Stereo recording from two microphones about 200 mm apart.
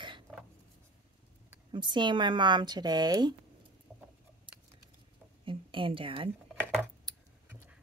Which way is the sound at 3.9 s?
Centre (ahead or behind).